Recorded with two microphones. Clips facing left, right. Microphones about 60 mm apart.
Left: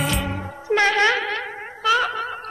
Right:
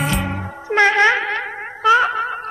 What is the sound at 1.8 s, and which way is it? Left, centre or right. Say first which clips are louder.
Gargling: right 6 dB; right.